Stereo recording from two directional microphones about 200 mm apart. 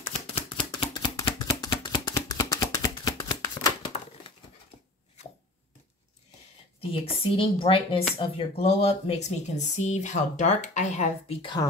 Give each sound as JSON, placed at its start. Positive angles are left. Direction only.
{"t": 0.5, "sound": "chopping", "side_deg": 25}
{"t": 6.8, "sound": "a woman's voice", "side_deg": 30}